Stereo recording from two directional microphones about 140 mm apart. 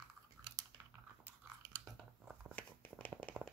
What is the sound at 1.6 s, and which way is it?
Biting, 25° right (ahead or behind).